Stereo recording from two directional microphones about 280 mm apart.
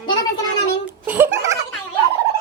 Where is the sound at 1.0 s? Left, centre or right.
Centre.